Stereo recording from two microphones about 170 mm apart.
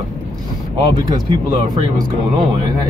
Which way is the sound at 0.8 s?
25° right (ahead or behind).